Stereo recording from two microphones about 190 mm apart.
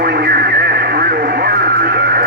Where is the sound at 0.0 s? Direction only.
55° right (ahead or behind).